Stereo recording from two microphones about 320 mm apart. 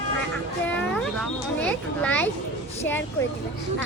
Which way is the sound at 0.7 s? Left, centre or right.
Centre.